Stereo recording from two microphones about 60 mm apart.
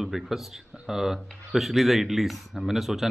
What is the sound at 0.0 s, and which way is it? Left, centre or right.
Speech, centre.